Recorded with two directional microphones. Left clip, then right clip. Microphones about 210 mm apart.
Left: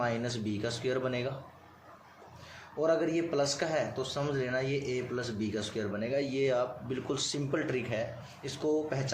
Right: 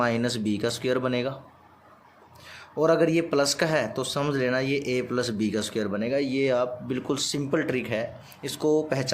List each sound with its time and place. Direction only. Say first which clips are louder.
0.0 s speech: right 7 dB; 45° right (ahead or behind)
2.7 s speech: right 7 dB; 50° right (ahead or behind)
8.4 s speech: right 7 dB; 50° right (ahead or behind)